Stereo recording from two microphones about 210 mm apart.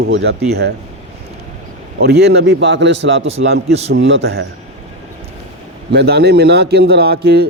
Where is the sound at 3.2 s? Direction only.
30° right (ahead or behind).